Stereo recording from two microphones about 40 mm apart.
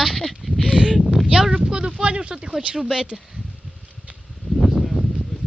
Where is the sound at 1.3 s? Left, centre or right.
Right.